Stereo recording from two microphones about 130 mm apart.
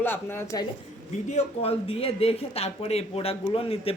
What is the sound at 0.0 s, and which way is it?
Speech, 15° left (ahead or behind).